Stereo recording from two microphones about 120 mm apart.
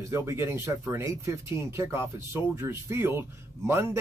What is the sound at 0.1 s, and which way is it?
Speech, 20° right (ahead or behind).